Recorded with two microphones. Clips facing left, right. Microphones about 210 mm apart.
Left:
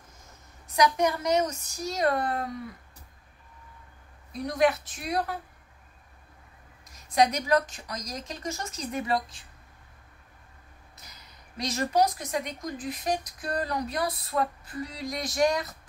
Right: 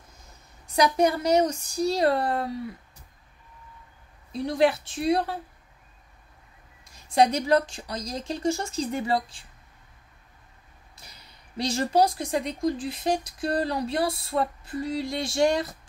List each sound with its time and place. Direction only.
0.7 s a woman's voice: 30° right (ahead or behind)
4.3 s speech: 30° right (ahead or behind)
6.8 s speech: 30° right (ahead or behind)
11.0 s speech: 30° right (ahead or behind)